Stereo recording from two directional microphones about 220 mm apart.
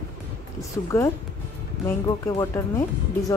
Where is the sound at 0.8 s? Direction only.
15° left (ahead or behind).